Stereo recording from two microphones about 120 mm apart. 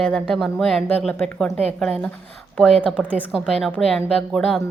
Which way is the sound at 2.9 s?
15° right (ahead or behind).